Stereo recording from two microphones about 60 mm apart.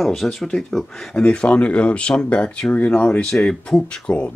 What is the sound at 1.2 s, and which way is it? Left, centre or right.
Speech, centre.